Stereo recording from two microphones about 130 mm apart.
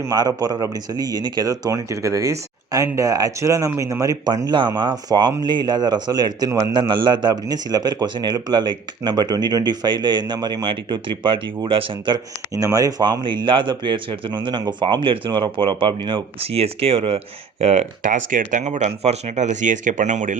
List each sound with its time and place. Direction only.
0.0 s a man's voice: 30° right (ahead or behind); by 17.2 s 50° right (ahead or behind)
17.6 s speech: 60° right (ahead or behind)